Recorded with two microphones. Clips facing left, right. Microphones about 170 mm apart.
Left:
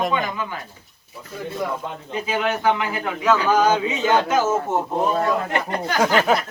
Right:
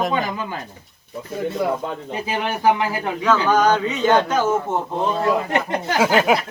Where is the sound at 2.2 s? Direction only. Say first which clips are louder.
Left 3 dB; 30° right (ahead or behind).